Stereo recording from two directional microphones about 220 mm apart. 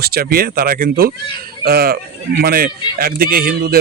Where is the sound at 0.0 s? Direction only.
45° right (ahead or behind).